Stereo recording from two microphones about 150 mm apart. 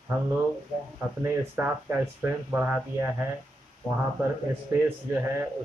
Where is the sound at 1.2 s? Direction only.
15° right (ahead or behind).